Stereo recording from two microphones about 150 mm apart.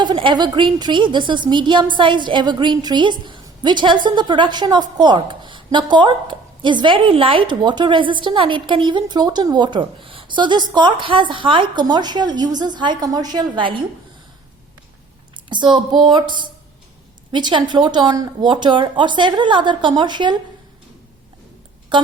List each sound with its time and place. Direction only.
0.0 s a woman's voice: 30° right (ahead or behind)
15.4 s a woman's voice: 30° right (ahead or behind)
21.9 s speech: 30° right (ahead or behind)